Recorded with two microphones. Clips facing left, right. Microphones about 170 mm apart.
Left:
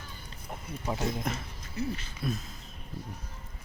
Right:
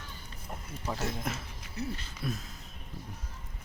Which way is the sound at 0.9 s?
5° right (ahead or behind).